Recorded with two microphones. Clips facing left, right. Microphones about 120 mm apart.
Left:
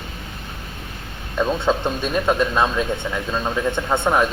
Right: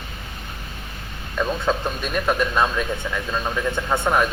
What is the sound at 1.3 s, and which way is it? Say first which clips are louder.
A man's voice: left 3 dB; 25° left (ahead or behind).